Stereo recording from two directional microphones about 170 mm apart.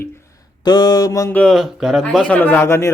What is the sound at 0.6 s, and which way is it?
Speech, 25° left (ahead or behind).